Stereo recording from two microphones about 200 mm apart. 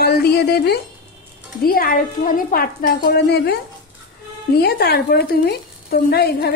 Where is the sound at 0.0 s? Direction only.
50° left (ahead or behind).